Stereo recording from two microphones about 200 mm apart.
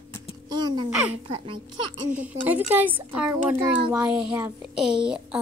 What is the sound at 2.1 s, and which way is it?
Speech, 10° right (ahead or behind).